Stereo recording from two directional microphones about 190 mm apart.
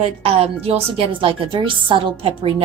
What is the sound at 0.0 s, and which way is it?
A woman's voice, 30° right (ahead or behind).